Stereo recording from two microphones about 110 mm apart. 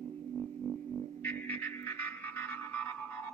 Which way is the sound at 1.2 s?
20° left (ahead or behind).